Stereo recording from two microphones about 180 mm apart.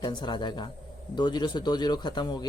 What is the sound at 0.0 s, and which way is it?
Speech, 25° left (ahead or behind).